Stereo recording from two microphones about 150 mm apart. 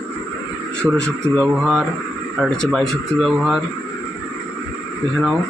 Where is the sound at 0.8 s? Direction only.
5° right (ahead or behind).